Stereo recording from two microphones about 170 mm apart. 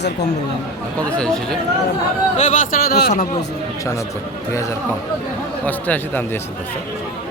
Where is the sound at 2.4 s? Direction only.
50° left (ahead or behind).